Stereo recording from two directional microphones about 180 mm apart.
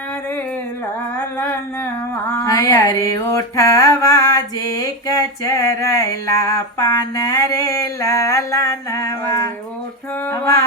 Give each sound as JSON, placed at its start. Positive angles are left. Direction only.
{"t": 2.4, "sound": "mantra", "side_deg": 20}
{"t": 10.2, "sound": "music", "side_deg": 15}